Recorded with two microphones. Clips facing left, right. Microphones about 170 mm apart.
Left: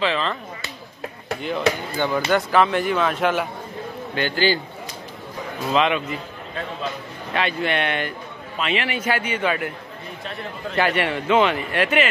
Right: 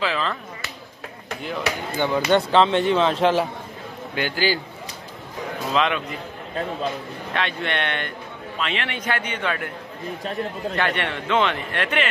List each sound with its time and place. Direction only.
0.0 s speech: 5° right (ahead or behind)
2.0 s speech: 20° right (ahead or behind)
4.1 s a man's voice: 10° right (ahead or behind)
5.7 s speech: 5° left (ahead or behind)
7.3 s speech: 5° left (ahead or behind)
10.8 s speech: 5° left (ahead or behind)